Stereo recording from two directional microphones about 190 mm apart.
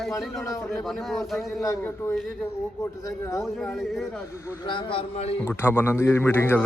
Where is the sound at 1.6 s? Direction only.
15° left (ahead or behind).